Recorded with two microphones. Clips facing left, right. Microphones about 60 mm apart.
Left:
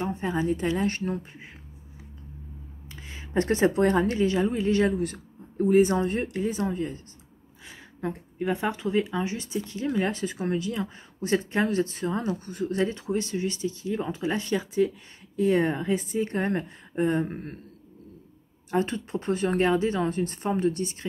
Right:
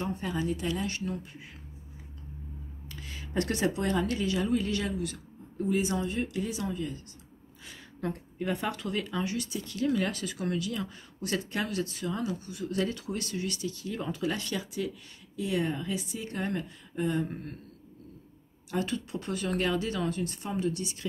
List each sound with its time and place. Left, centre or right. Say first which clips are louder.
0.0 s a woman's voice: left 5 dB; left
2.9 s a woman's voice: left 5 dB; left
7.6 s a woman's voice: left 2 dB; centre; by 12.6 s left
12.6 s a woman's voice: left 5 dB; left
15.3 s a woman's voice: left 7 dB; left
18.7 s a woman's voice: left 5 dB; left